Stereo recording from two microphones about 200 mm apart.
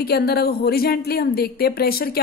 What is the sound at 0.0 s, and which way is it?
Speech, 50° left (ahead or behind).